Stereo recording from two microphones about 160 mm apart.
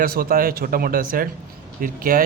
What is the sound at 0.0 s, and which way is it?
A man's voice, 65° right (ahead or behind).